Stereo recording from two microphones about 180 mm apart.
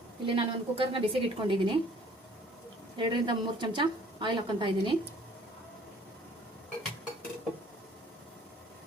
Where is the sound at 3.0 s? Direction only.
25° right (ahead or behind).